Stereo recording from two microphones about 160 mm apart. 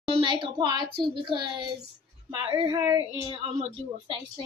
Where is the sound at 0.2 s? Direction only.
30° right (ahead or behind).